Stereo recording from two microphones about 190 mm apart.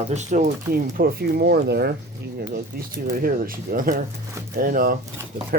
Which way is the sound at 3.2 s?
50° right (ahead or behind).